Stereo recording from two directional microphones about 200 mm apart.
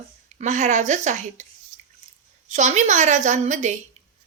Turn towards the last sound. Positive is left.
turn(degrees=-35)  # may be behind; listen again after turning